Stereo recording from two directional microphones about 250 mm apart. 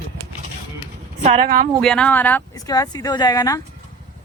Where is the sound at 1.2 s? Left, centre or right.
Right.